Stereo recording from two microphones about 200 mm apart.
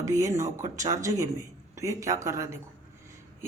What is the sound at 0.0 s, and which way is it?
Speech, 15° right (ahead or behind).